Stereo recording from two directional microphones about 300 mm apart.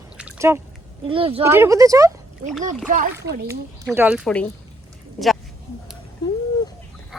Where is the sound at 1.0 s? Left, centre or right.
Centre.